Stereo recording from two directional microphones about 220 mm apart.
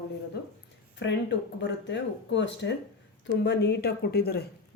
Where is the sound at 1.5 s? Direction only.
55° left (ahead or behind).